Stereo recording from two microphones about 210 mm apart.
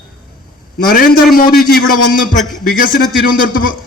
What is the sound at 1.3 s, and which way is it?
A man's voice, 45° left (ahead or behind).